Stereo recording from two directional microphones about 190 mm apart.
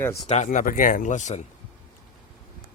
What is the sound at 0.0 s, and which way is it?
Speech, 15° left (ahead or behind).